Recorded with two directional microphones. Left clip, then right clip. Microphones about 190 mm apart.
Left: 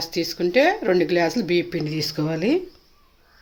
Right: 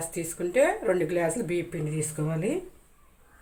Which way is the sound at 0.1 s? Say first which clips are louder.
Left 9 dB; 55° left (ahead or behind).